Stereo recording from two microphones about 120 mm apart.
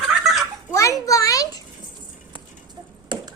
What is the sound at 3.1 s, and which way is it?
Finger snapping, 40° right (ahead or behind).